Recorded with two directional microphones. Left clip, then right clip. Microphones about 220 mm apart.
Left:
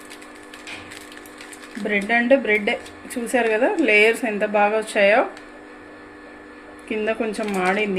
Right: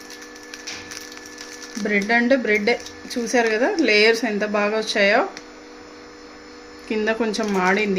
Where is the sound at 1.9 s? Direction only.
40° right (ahead or behind).